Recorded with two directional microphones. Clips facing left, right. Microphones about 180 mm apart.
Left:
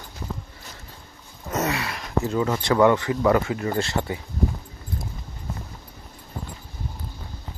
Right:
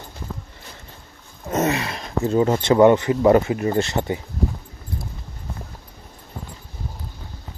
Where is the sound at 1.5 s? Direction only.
25° right (ahead or behind).